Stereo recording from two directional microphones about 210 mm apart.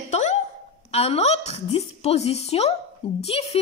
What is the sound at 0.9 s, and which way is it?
A woman's voice, 30° left (ahead or behind).